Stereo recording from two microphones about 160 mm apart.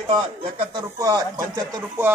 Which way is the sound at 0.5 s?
25° right (ahead or behind).